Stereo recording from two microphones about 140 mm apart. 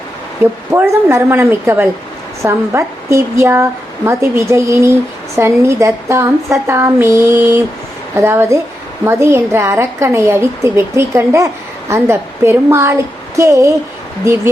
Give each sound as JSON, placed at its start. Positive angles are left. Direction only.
{"t": 0.7, "sound": "a woman's voice", "side_deg": -15}